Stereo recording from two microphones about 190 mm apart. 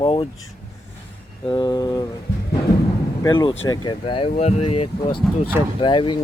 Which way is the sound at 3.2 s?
25° left (ahead or behind).